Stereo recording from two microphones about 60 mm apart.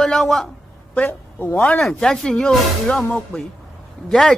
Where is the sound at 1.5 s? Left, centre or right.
Centre.